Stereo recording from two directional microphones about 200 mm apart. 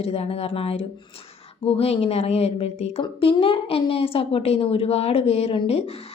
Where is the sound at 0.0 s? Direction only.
30° left (ahead or behind).